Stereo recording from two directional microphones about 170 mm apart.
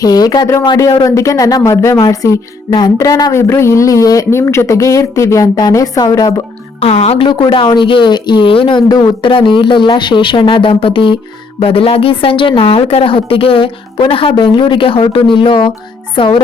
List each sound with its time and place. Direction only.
0.0 s a woman's voice: 20° left (ahead or behind)
6.7 s a woman's voice: 35° left (ahead or behind)